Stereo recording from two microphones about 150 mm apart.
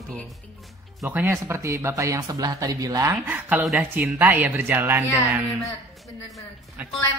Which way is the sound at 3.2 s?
10° right (ahead or behind).